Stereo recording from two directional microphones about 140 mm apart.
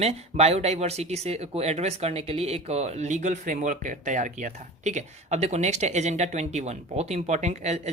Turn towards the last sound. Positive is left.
turn(degrees=-55)  # may be behind; listen again after turning